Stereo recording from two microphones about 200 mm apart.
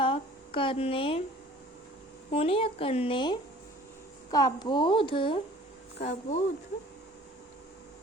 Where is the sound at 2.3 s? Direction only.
30° left (ahead or behind).